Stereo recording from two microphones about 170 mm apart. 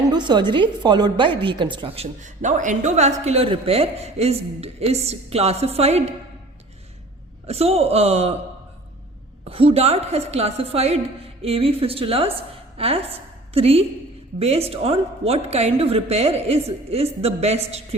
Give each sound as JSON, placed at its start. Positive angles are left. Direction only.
{"t": 0.1, "sound": "a woman's voice", "side_deg": -25}
{"t": 2.2, "sound": "a woman's voice", "side_deg": -45}
{"t": 7.4, "sound": "a woman's voice", "side_deg": -35}
{"t": 9.5, "sound": "a woman's voice", "side_deg": -35}